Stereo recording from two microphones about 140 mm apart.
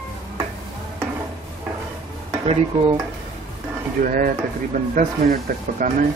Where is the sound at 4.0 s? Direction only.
80° right.